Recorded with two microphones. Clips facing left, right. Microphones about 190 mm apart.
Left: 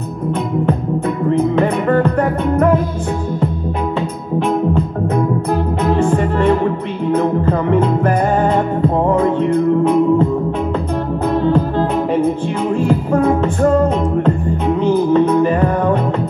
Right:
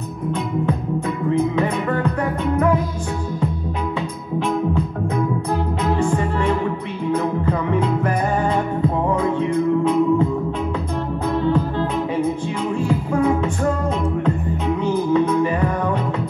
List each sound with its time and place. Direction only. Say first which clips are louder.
1.6 s music: left 6 dB; 60° left (ahead or behind)
5.9 s music: left 5 dB; 55° left (ahead or behind)
12.8 s music: left 4 dB; 55° left (ahead or behind)
15.1 s music: left 5 dB; 60° left (ahead or behind)